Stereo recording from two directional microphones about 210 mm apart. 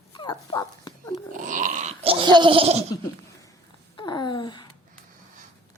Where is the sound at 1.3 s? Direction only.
40° right (ahead or behind).